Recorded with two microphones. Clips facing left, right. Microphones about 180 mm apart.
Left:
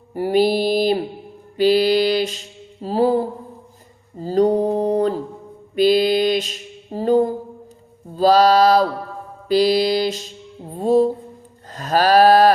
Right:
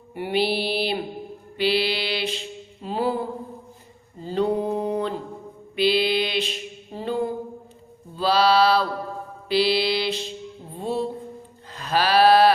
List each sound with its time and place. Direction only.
0.1 s mantra: 40° left (ahead or behind)
4.2 s mantra: 40° left (ahead or behind)
10.8 s music: 40° left (ahead or behind)
11.7 s a sound: 45° left (ahead or behind)